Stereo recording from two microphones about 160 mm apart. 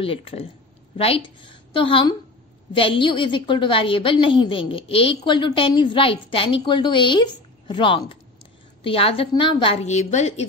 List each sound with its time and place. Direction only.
0.0 s a woman's voice: 35° left (ahead or behind)